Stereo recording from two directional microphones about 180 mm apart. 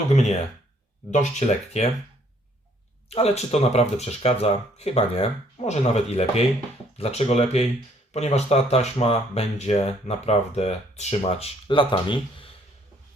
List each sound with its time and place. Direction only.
1.1 s speech: 40° left (ahead or behind)
3.1 s speech: 35° left (ahead or behind)